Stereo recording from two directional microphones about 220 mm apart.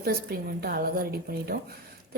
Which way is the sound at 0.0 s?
45° right (ahead or behind).